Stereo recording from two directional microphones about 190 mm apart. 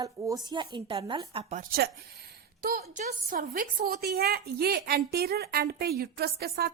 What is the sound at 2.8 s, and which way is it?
Speech, 40° right (ahead or behind).